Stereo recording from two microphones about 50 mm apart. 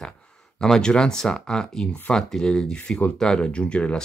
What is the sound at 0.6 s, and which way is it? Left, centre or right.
Speech, centre.